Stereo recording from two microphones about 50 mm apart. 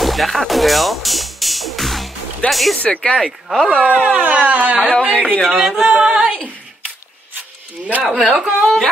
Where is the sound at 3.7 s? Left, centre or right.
Right.